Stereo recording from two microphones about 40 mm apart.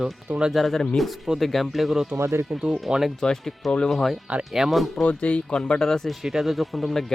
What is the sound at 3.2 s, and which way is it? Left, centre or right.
Speech, centre.